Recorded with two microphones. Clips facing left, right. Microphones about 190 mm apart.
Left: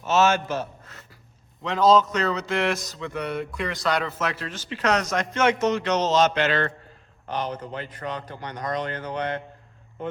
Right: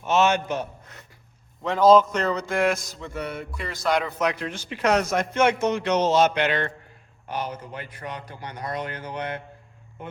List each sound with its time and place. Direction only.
0.0 s a man's voice: 15° right (ahead or behind)
3.1 s music: centre (ahead or behind)
3.8 s a man's voice: 15° right (ahead or behind)